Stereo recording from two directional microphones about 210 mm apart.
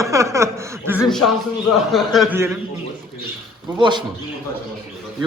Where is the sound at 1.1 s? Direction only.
Centre (ahead or behind).